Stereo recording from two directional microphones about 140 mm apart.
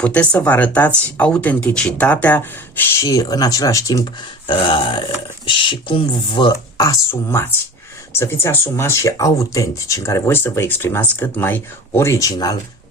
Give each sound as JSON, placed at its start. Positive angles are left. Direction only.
{"t": 0.0, "sound": "speech", "side_deg": 10}
{"t": 2.9, "sound": "speech", "side_deg": 25}
{"t": 6.8, "sound": "speech", "side_deg": 20}